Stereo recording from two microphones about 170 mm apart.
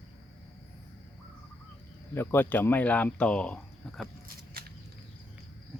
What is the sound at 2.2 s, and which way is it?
Speech, 10° left (ahead or behind).